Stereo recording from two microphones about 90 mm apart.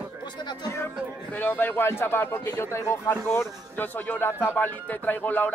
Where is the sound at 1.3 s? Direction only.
20° left (ahead or behind).